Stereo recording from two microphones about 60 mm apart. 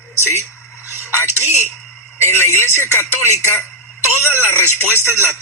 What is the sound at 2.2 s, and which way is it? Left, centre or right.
Speech, left.